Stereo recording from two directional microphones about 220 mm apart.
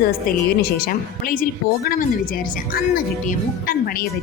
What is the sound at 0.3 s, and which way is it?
Speech, 40° left (ahead or behind).